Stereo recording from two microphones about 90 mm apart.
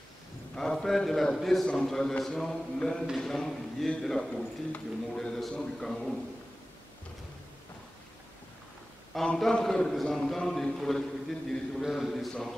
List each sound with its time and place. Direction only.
0.6 s a man's voice: 5° left (ahead or behind)
9.1 s a man's voice: 5° left (ahead or behind)